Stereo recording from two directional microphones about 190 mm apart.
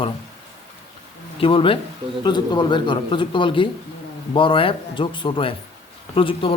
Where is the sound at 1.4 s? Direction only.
30° left (ahead or behind).